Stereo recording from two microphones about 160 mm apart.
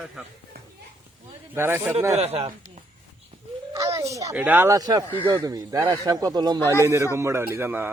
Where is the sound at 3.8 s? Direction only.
20° right (ahead or behind).